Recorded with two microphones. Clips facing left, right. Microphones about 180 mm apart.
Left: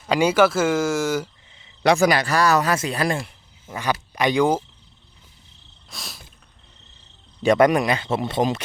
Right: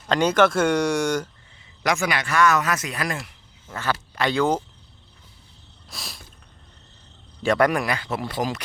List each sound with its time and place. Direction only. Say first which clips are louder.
0.1 s speech: left 1 dB; 10° left (ahead or behind)
1.8 s speech: left 7 dB; 35° left (ahead or behind)
3.7 s speech: left 2 dB; 15° left (ahead or behind)
5.9 s a sound: even; centre (ahead or behind)
7.4 s speech: left 4 dB; 20° left (ahead or behind)